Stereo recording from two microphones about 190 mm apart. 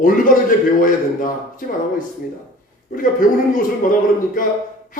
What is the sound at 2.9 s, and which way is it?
A man's voice, 45° left (ahead or behind).